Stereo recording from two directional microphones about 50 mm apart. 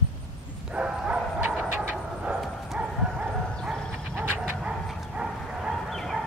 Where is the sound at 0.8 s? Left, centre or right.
Right.